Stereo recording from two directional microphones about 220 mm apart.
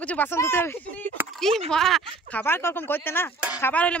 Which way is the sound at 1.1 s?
Centre (ahead or behind).